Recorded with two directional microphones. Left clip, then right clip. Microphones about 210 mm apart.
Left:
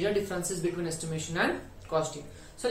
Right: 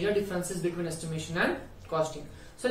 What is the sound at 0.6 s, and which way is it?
Speech, 25° left (ahead or behind).